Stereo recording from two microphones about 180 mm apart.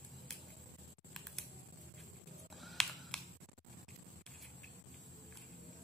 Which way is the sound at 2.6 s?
5° left (ahead or behind).